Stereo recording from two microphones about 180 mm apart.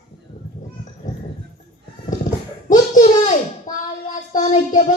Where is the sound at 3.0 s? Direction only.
45° left (ahead or behind).